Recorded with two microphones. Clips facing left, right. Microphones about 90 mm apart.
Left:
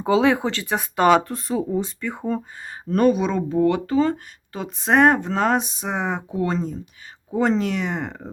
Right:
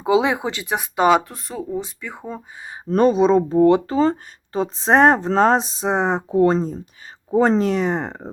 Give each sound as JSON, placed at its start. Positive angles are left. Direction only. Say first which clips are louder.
{"t": 0.0, "sound": "speech", "louder": "even", "side_deg": -15}
{"t": 2.8, "sound": "speech", "louder": "right 3 dB", "side_deg": -30}